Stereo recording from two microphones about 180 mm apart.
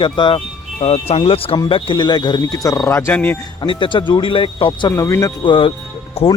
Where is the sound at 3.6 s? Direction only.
25° left (ahead or behind).